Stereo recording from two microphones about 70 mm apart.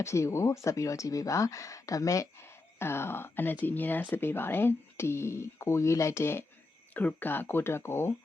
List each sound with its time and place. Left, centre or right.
0.0 s speech: left
2.7 s speech: left
6.9 s speech: left